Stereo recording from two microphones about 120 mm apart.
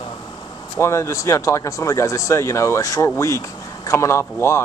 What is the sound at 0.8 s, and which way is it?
Speech, 25° left (ahead or behind).